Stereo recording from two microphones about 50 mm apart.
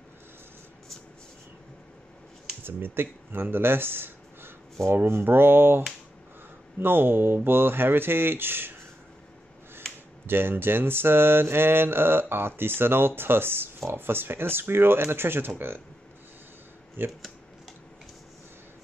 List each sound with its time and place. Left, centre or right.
2.6 s speech: right
5.0 s mantra: right
10.2 s mantra: right
17.0 s mantra: right